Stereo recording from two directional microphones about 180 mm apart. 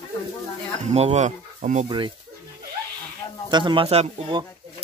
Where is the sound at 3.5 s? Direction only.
25° right (ahead or behind).